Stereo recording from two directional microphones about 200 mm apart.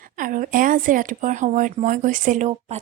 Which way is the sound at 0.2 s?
40° right (ahead or behind).